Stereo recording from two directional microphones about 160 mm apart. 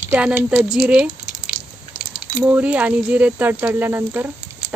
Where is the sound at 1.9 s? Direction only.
10° right (ahead or behind).